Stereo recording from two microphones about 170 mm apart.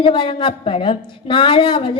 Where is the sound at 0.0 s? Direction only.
30° left (ahead or behind).